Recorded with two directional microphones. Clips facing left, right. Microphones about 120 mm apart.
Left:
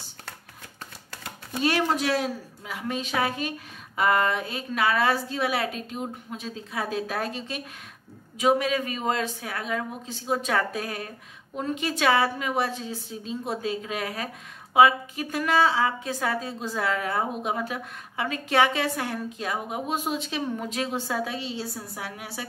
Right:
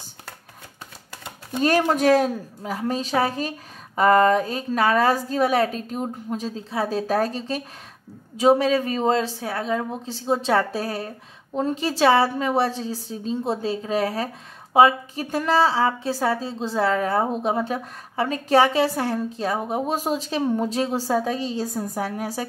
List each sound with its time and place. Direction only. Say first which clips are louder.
1.6 s a woman's voice: right 5 dB; 45° right (ahead or behind)